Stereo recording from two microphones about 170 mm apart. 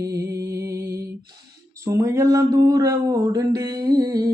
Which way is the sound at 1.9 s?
20° right (ahead or behind).